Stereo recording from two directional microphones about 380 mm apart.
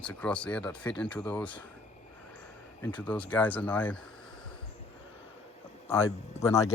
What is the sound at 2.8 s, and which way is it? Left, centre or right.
Speech, centre.